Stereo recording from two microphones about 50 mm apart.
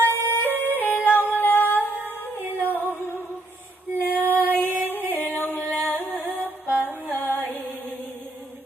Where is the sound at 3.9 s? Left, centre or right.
Right.